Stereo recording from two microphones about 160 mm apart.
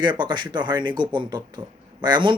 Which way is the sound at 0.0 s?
30° right (ahead or behind).